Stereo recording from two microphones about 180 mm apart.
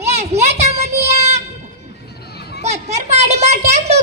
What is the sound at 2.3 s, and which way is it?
Children playing, 65° left (ahead or behind).